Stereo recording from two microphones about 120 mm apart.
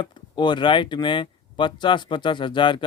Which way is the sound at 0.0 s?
40° left (ahead or behind).